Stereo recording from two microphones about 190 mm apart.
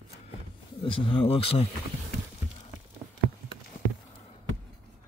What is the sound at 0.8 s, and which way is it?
Speech, 30° left (ahead or behind).